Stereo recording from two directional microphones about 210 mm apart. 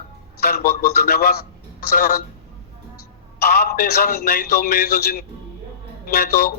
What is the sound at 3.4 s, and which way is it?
A man's voice, 50° left (ahead or behind).